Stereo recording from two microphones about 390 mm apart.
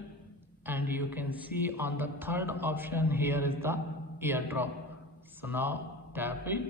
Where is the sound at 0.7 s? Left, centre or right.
Centre.